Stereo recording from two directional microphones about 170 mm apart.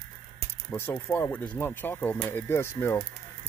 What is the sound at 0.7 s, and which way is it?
Speech, 15° left (ahead or behind).